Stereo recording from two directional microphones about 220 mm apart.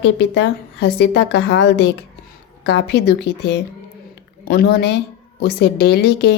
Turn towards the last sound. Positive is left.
turn(degrees=50)  # may be behind; listen again after turning